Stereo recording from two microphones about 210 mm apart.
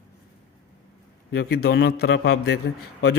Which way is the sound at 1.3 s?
50° left (ahead or behind).